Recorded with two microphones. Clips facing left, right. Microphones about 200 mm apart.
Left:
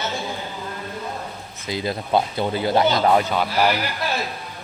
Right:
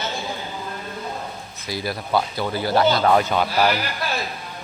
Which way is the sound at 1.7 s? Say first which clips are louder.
Left 2 dB; 20° left (ahead or behind).